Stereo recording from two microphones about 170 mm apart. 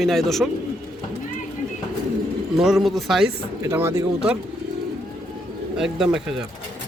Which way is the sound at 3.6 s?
15° right (ahead or behind).